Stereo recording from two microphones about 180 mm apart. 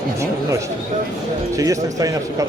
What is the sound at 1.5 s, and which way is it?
Speech, 20° right (ahead or behind).